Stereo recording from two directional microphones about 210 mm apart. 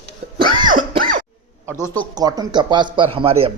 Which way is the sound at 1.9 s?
20° right (ahead or behind).